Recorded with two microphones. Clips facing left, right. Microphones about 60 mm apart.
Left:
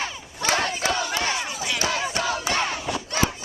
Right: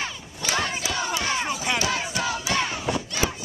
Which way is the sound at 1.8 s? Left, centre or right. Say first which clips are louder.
Left 1 dB; left.